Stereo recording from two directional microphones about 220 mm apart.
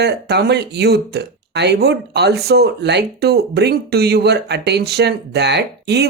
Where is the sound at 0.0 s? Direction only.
50° right (ahead or behind).